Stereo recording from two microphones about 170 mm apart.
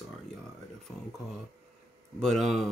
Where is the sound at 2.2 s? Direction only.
Centre (ahead or behind).